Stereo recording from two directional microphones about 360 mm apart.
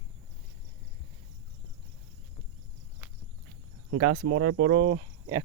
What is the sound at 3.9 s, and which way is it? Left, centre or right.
Speech, right.